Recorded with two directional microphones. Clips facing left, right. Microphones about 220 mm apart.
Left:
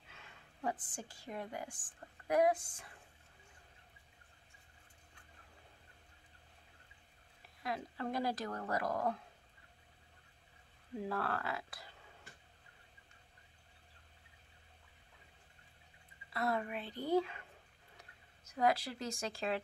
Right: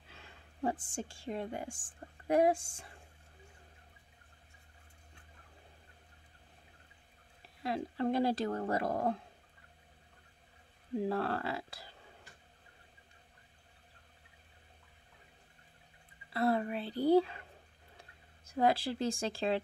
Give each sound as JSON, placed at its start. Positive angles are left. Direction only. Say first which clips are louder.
{"t": 0.1, "sound": "a woman's voice", "louder": "right 3 dB", "side_deg": -30}
{"t": 7.6, "sound": "speech", "louder": "right 7 dB", "side_deg": -30}
{"t": 11.0, "sound": "speech", "louder": "right 5 dB", "side_deg": -30}
{"t": 16.3, "sound": "speech", "louder": "right 6 dB", "side_deg": -30}